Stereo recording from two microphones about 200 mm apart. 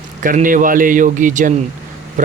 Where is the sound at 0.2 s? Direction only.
40° right (ahead or behind).